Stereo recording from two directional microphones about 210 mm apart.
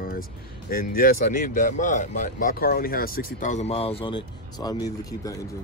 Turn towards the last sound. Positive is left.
turn(degrees=15)  # may be behind; listen again after turning